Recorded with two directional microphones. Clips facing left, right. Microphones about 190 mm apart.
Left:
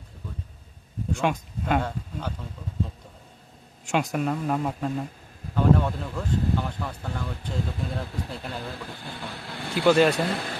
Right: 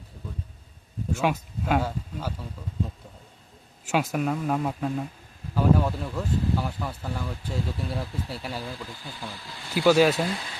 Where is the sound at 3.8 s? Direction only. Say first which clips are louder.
Even; 5° right (ahead or behind).